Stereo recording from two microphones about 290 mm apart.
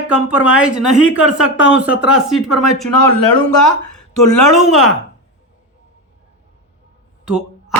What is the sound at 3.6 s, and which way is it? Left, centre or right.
Speech, left.